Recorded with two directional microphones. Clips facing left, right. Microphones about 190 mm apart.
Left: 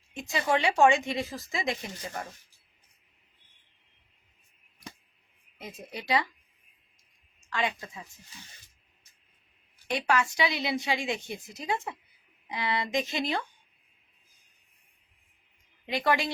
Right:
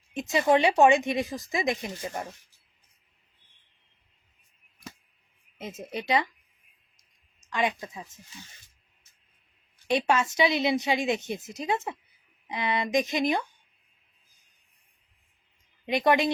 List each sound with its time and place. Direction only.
0.1 s a woman's voice: 20° right (ahead or behind)
5.5 s a woman's voice: 20° right (ahead or behind)
7.4 s a woman's voice: 20° right (ahead or behind)
9.8 s a woman's voice: 20° right (ahead or behind)
15.9 s a woman's voice: 20° right (ahead or behind)